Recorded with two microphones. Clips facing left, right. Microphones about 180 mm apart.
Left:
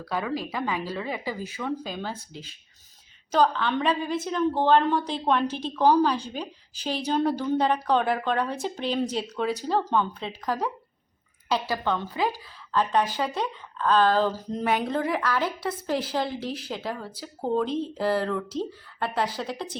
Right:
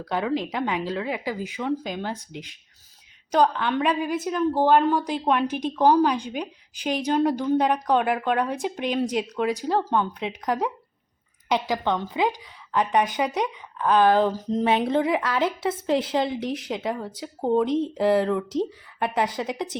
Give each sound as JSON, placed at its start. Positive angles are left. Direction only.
{"t": 0.0, "sound": "a woman's voice", "side_deg": -20}